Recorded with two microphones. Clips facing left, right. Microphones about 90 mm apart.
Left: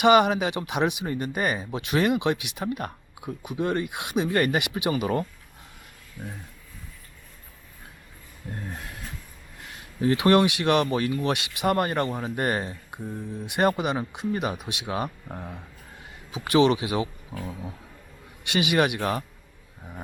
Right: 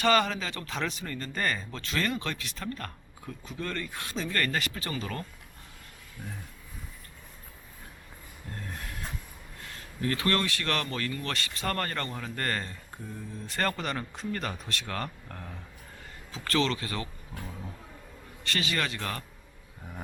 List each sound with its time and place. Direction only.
0.0 s speech: 15° left (ahead or behind)
9.6 s speech: 20° left (ahead or behind)
18.4 s speech: 15° left (ahead or behind)